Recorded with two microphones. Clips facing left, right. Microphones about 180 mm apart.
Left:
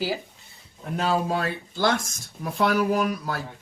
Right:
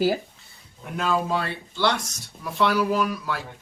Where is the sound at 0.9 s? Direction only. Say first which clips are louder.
Even; 40° left (ahead or behind).